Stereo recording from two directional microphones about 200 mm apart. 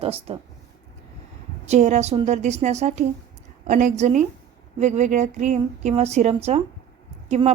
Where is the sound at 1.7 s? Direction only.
35° right (ahead or behind).